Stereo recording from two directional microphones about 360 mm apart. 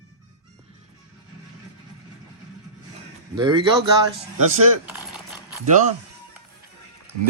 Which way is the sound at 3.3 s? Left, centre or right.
Centre.